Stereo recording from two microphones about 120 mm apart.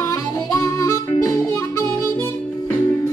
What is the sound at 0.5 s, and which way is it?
Harmonica, 25° left (ahead or behind).